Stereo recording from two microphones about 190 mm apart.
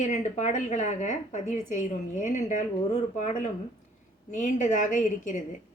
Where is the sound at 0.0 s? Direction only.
40° left (ahead or behind).